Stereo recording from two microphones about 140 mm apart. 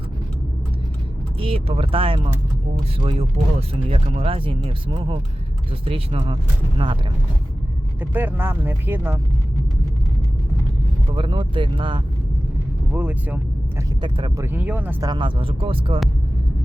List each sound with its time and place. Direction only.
1.4 s speech: 40° right (ahead or behind)
8.1 s speech: 15° right (ahead or behind)
11.1 s speech: 35° right (ahead or behind)
12.9 s speech: 10° right (ahead or behind)
15.0 s speech: 35° right (ahead or behind)